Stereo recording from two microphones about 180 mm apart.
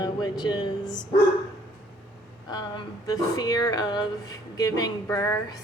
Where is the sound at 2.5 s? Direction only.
20° left (ahead or behind).